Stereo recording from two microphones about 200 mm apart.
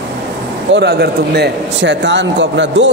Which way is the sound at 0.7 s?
55° right (ahead or behind).